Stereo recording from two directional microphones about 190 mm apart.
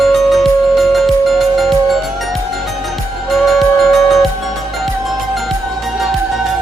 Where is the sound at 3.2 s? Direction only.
Centre (ahead or behind).